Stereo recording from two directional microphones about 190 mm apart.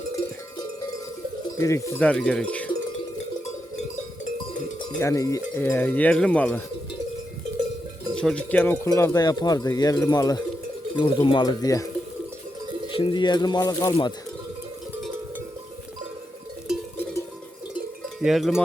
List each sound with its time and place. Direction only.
1.5 s cowbell: 15° left (ahead or behind)
4.8 s cowbell: 20° left (ahead or behind)
8.1 s speech: 5° left (ahead or behind)
13.0 s speech: 25° left (ahead or behind)
18.2 s cowbell: centre (ahead or behind)